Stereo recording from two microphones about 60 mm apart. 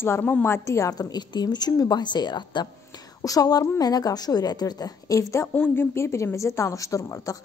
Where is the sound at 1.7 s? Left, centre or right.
Left.